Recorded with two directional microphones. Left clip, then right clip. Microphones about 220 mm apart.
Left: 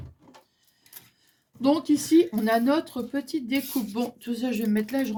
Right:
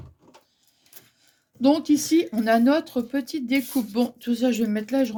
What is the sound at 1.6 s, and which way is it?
Speech, 40° right (ahead or behind).